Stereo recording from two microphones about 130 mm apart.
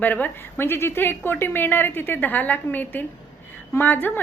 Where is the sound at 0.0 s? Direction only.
15° left (ahead or behind).